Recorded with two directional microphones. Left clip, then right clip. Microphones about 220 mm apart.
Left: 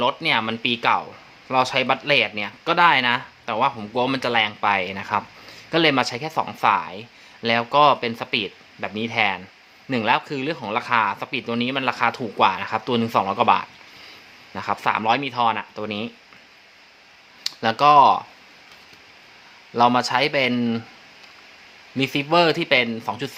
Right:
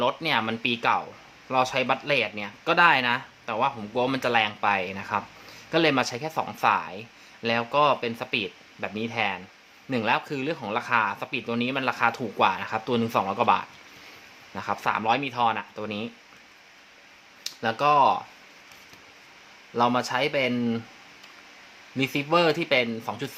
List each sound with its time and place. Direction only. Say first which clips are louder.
0.0 s speech: left 4 dB; 5° left (ahead or behind)
17.4 s speech: left 7 dB; 20° left (ahead or behind)
19.7 s speech: left 6 dB; 15° left (ahead or behind)
21.9 s speech: left 4 dB; 10° left (ahead or behind)